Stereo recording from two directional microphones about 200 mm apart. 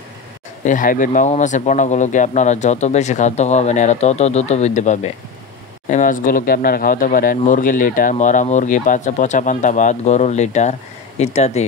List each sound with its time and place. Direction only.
0.7 s speech: 40° left (ahead or behind)